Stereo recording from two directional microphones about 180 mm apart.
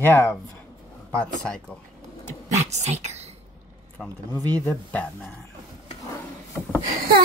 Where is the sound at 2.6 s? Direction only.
40° right (ahead or behind).